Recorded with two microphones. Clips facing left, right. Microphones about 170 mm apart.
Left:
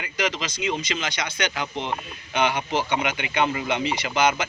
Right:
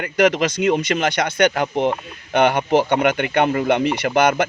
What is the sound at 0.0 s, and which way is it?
Speech, 60° right (ahead or behind).